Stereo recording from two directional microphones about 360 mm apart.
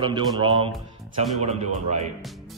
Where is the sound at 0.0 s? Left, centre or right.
Centre.